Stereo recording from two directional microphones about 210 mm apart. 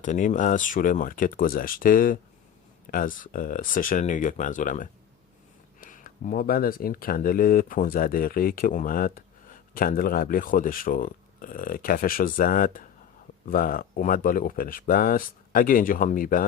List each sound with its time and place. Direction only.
0.0 s speech: 35° left (ahead or behind)